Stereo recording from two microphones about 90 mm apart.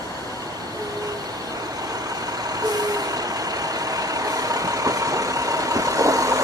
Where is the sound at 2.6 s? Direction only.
45° right (ahead or behind).